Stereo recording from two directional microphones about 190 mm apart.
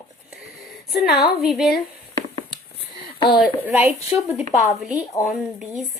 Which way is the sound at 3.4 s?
10° right (ahead or behind).